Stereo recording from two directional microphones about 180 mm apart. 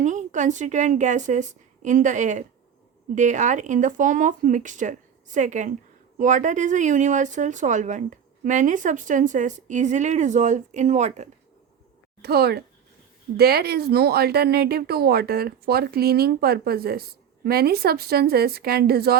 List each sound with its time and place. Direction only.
0.0 s a woman's voice: 40° right (ahead or behind)
12.2 s a woman's voice: 65° right (ahead or behind)